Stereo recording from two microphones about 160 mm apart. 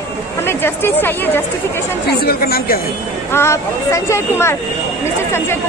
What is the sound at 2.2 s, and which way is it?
Speech, 70° left (ahead or behind).